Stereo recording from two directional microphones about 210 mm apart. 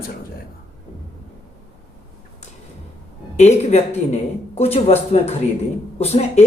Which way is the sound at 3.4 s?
30° left (ahead or behind).